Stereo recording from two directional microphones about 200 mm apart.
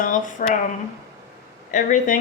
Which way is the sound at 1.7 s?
40° left (ahead or behind).